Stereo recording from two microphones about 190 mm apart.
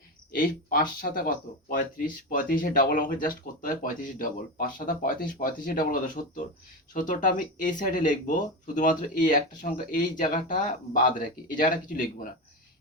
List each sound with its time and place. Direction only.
0.3 s speech: 50° left (ahead or behind)